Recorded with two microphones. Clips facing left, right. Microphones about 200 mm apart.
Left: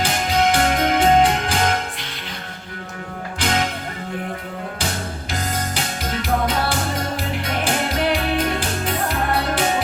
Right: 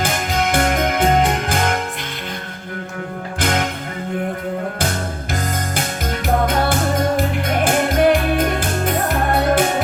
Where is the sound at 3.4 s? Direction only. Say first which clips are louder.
Right 2 dB; 50° right (ahead or behind).